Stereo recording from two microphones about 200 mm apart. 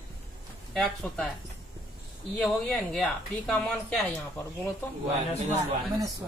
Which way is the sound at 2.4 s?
Centre (ahead or behind).